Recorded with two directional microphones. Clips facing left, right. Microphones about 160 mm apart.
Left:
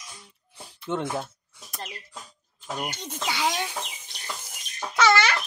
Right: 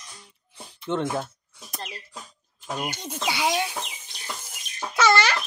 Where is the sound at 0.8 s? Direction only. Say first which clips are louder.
Right 2 dB; 5° left (ahead or behind).